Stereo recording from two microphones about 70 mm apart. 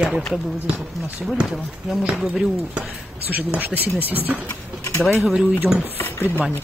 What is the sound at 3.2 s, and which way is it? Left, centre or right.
Speech, right.